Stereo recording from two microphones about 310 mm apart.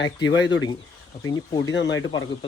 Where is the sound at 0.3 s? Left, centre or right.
Left.